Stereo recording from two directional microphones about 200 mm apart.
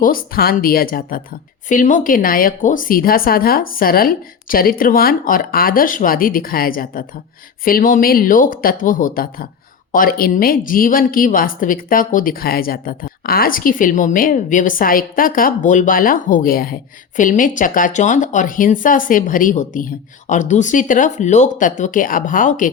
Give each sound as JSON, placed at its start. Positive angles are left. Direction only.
{"t": 0.0, "sound": "a woman's voice", "side_deg": 45}